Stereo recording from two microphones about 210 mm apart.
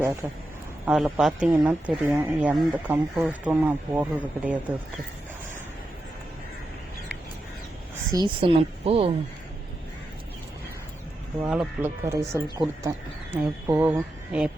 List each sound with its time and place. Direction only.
0.9 s speech: 5° right (ahead or behind)
8.1 s speech: 25° right (ahead or behind)
11.4 s speech: 5° right (ahead or behind)